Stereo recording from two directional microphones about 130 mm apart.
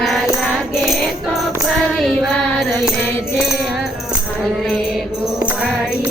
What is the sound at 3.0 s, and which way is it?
Music, 15° left (ahead or behind).